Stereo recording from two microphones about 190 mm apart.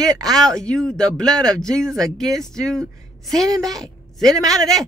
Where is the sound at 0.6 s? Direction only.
5° left (ahead or behind).